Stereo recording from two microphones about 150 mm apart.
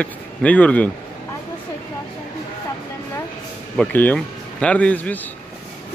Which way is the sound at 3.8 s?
10° left (ahead or behind).